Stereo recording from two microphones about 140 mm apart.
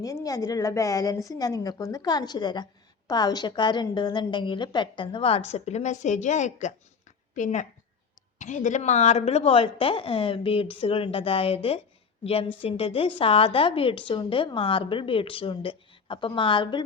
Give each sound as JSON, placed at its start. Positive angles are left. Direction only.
{"t": 0.0, "sound": "a woman's voice", "side_deg": 25}